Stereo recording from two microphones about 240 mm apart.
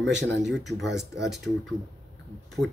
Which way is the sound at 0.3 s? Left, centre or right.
Right.